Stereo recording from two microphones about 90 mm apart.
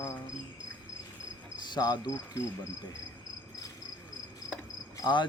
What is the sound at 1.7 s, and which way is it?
Cricket, 55° left (ahead or behind).